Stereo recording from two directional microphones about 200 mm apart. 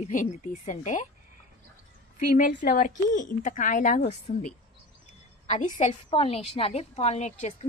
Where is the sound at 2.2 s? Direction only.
40° left (ahead or behind).